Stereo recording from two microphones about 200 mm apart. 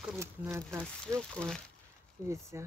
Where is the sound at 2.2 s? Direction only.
15° right (ahead or behind).